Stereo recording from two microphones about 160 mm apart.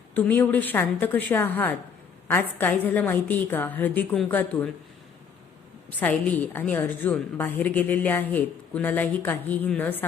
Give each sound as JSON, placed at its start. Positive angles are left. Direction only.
{"t": 0.1, "sound": "a woman's voice", "side_deg": 10}
{"t": 6.0, "sound": "a woman's voice", "side_deg": 10}